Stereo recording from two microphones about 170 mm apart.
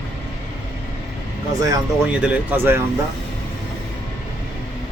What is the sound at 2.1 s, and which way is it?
Speech, 10° right (ahead or behind).